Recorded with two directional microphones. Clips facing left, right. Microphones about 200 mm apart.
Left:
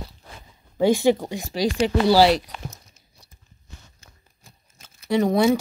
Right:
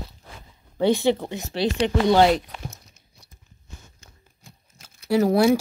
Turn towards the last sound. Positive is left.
turn(degrees=-5)  # may be behind; listen again after turning